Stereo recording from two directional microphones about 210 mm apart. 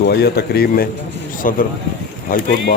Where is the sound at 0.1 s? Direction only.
50° left (ahead or behind).